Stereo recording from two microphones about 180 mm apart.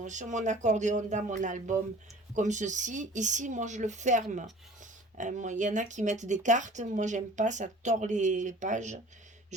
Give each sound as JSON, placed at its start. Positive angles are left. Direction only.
{"t": 0.0, "sound": "speech", "side_deg": -45}